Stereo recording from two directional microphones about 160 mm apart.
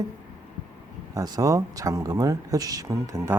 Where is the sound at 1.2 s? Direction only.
25° right (ahead or behind).